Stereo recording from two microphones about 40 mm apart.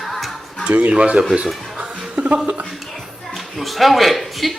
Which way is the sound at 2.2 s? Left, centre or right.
Right.